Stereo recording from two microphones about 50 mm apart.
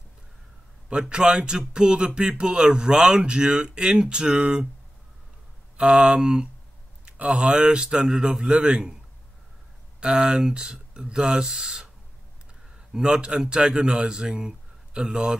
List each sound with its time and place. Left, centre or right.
0.8 s speech: centre
5.8 s speech: centre
9.9 s speech: centre
12.9 s speech: centre